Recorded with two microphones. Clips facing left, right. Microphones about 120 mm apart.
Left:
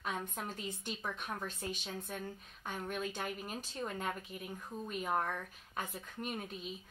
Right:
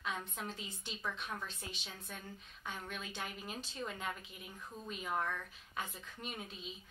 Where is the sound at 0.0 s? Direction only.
50° left (ahead or behind).